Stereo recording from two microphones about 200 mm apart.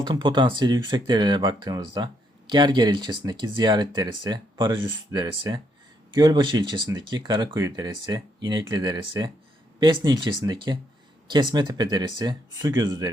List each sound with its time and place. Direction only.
0.0 s speech: 25° right (ahead or behind)